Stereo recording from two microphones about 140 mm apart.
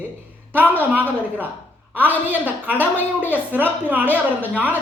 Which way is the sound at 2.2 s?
10° right (ahead or behind).